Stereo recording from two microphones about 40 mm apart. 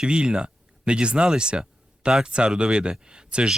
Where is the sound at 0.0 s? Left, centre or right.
Right.